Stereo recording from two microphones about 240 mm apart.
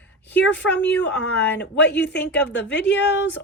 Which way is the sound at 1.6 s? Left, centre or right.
Left.